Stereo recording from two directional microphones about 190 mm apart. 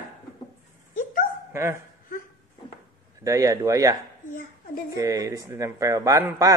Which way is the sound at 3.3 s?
15° right (ahead or behind).